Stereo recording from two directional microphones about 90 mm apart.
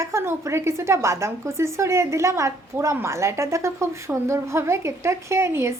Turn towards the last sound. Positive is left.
turn(degrees=-30)  # may be behind; listen again after turning